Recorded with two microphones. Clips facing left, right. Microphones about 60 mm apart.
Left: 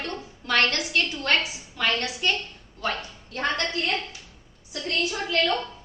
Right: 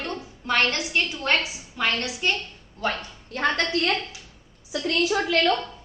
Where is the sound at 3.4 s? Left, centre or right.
Right.